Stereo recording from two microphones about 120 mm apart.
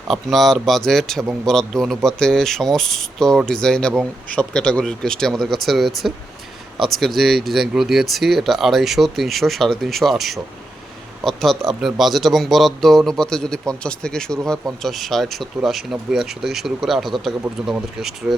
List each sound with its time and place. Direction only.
0.1 s speech: centre (ahead or behind)